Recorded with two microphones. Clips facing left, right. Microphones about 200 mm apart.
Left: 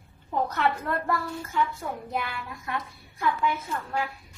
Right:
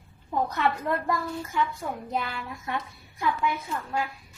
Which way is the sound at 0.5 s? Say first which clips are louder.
Even; 15° right (ahead or behind).